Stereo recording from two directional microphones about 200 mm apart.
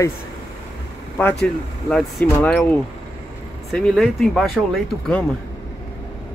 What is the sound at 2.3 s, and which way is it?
Speech, 10° left (ahead or behind).